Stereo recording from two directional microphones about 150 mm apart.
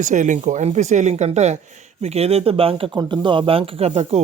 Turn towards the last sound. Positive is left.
turn(degrees=-45)  # may be behind; listen again after turning